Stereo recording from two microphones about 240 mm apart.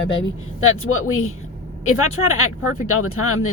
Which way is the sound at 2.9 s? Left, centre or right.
Left.